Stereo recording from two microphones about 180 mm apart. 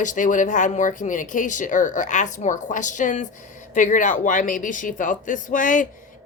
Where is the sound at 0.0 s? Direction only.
45° left (ahead or behind).